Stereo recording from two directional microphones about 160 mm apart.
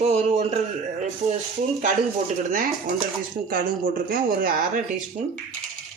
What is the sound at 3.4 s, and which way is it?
Speech, 65° right (ahead or behind).